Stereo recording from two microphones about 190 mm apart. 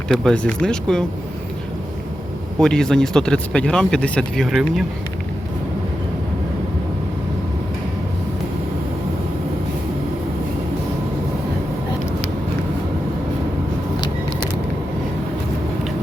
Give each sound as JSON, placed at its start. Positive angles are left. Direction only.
{"t": 0.1, "sound": "speech", "side_deg": 5}
{"t": 2.6, "sound": "speech", "side_deg": 5}